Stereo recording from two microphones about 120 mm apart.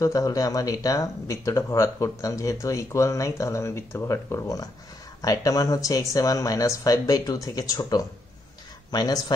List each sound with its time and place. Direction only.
0.0 s speech: 30° left (ahead or behind)